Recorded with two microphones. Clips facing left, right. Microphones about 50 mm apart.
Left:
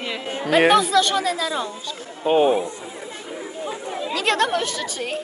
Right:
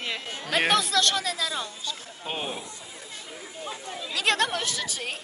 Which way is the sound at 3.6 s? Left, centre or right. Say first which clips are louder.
Left 7 dB; left.